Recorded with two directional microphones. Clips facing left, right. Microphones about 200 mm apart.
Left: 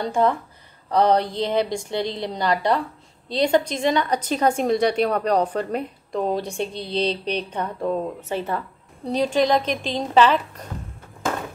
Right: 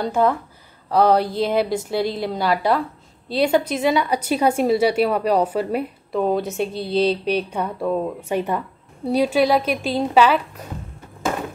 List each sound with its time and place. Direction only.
0.0 s a woman's voice: 5° right (ahead or behind)